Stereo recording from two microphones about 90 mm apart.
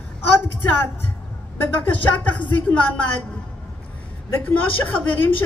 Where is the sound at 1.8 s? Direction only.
20° left (ahead or behind).